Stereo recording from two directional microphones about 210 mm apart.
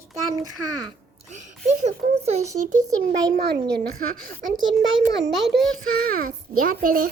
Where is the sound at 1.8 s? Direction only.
30° right (ahead or behind).